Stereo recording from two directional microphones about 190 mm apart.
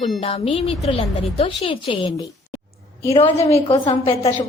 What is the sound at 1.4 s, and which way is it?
Speech, 30° left (ahead or behind).